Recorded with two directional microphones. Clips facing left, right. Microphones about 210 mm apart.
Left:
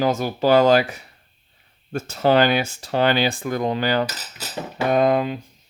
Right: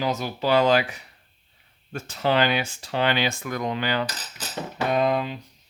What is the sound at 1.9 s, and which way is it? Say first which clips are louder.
Speech: left 5 dB; 40° left (ahead or behind).